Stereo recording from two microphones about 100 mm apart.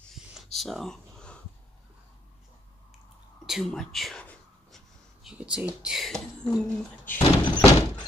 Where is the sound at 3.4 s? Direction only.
Centre (ahead or behind).